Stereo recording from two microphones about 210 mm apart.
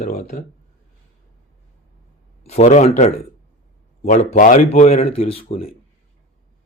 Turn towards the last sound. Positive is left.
turn(degrees=30)  # may be behind; listen again after turning